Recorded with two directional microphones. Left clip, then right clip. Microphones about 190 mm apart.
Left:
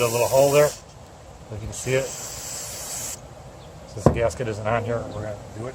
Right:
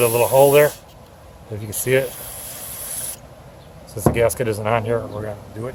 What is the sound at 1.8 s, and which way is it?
Speech, 55° right (ahead or behind).